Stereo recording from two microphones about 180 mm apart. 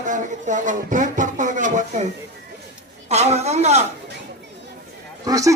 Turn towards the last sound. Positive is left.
turn(degrees=-20)  # may be behind; listen again after turning